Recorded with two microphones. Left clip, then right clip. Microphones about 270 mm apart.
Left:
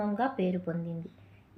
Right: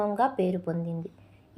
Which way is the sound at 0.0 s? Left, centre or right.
Centre.